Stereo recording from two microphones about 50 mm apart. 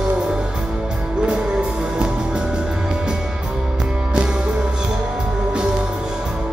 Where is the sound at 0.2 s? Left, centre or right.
Centre.